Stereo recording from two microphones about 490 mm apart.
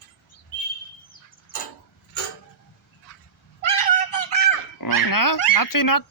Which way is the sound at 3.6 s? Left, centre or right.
Left.